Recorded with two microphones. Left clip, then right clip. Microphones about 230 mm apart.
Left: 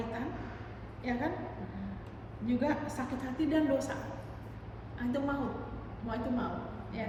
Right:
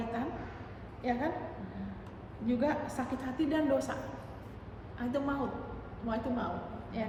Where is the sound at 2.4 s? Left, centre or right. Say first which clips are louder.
Right 1 dB; centre.